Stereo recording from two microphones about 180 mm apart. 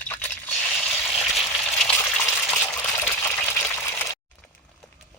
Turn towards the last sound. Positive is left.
turn(degrees=15)  # may be behind; listen again after turning